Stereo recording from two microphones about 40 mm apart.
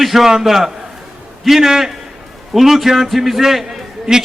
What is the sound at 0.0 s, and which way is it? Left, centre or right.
A man's voice, centre.